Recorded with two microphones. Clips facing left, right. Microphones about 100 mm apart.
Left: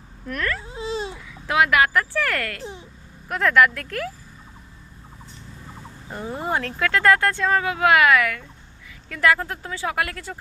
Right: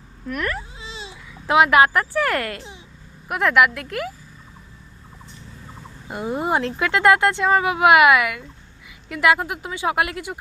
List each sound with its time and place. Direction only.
0.7 s a sound: 40° left (ahead or behind)
1.3 s speech: 25° right (ahead or behind)
3.2 s speech: 10° right (ahead or behind)
6.1 s speech: 15° right (ahead or behind)